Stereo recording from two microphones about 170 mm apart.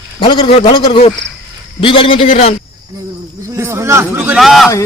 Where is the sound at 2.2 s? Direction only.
45° left (ahead or behind).